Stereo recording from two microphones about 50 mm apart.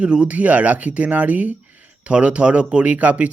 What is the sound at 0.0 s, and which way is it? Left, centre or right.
Speech, centre.